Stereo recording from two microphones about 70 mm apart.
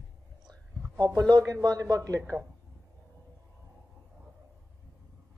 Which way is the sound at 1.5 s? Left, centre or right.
Right.